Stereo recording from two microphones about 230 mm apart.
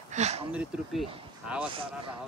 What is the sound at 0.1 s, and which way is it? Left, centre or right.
Speech, right.